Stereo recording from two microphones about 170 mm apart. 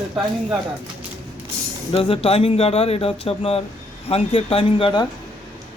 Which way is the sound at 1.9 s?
35° left (ahead or behind).